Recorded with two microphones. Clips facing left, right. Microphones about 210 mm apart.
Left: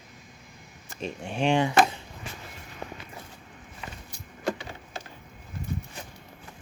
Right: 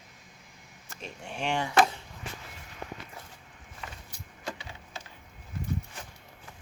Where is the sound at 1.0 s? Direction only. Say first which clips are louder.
Left 8 dB; 20° left (ahead or behind).